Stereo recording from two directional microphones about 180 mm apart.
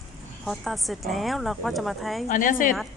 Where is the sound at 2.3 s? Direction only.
50° left (ahead or behind).